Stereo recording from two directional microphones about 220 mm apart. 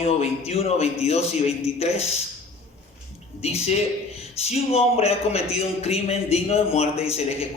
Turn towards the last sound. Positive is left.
turn(degrees=25)  # may be behind; listen again after turning